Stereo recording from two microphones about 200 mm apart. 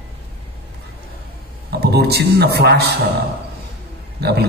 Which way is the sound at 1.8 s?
55° right (ahead or behind).